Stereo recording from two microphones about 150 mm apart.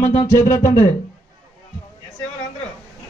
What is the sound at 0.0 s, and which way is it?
Speech, 20° left (ahead or behind).